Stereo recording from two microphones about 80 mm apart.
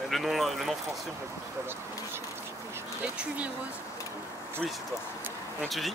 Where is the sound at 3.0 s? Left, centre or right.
Centre.